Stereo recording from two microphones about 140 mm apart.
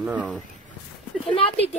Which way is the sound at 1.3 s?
40° left (ahead or behind).